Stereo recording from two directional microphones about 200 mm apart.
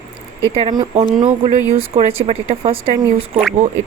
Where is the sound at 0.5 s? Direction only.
25° right (ahead or behind).